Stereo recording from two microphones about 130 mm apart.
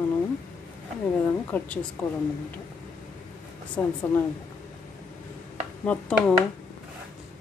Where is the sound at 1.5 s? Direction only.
15° left (ahead or behind).